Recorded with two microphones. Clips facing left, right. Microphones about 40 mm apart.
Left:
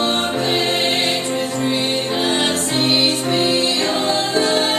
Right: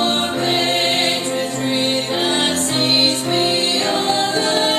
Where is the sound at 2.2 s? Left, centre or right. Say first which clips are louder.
Even; centre.